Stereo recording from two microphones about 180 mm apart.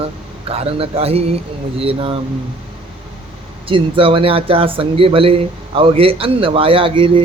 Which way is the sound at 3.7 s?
30° right (ahead or behind).